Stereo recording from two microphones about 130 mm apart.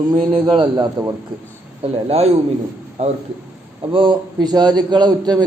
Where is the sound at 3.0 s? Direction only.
55° right (ahead or behind).